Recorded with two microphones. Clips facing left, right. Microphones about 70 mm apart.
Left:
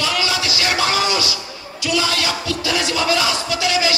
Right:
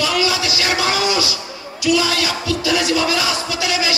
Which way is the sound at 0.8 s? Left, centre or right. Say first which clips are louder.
Even; left.